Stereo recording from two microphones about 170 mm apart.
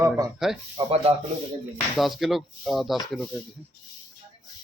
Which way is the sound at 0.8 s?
35° right (ahead or behind).